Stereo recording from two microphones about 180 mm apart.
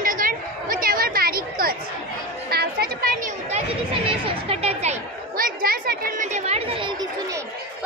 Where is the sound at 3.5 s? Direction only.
30° right (ahead or behind).